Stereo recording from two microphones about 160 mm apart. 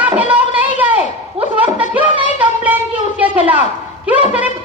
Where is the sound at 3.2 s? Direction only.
10° right (ahead or behind).